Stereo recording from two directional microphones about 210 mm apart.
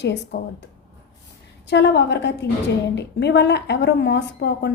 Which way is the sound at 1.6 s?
55° left (ahead or behind).